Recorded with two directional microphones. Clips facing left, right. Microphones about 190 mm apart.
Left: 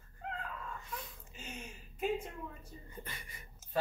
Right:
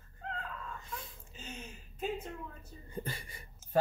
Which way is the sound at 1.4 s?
10° left (ahead or behind).